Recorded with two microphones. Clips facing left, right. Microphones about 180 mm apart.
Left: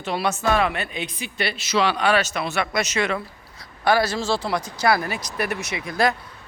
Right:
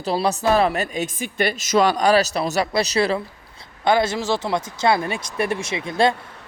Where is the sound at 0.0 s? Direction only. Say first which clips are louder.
Right 3 dB; 35° right (ahead or behind).